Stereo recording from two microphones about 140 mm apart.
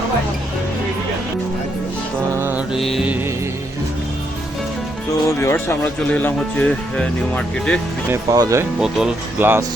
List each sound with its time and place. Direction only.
2.3 s music: 15° right (ahead or behind)
2.7 s mantra: centre (ahead or behind)
5.4 s speech: 15° left (ahead or behind)
8.1 s speech: 25° right (ahead or behind)
8.8 s mantra: 5° right (ahead or behind)
9.4 s speech: 15° right (ahead or behind)